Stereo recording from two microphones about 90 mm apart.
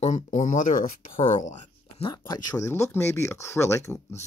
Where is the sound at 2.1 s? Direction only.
45° left (ahead or behind).